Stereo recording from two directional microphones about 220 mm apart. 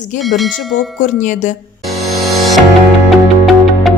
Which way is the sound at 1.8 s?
Centre (ahead or behind).